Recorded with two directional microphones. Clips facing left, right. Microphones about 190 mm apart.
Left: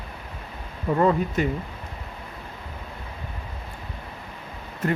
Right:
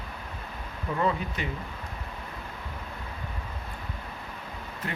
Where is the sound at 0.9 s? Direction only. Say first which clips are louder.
Left 7 dB; 45° left (ahead or behind).